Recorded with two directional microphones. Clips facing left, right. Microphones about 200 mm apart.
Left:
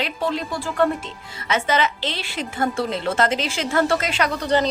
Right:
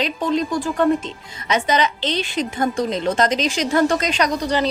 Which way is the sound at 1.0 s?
20° right (ahead or behind).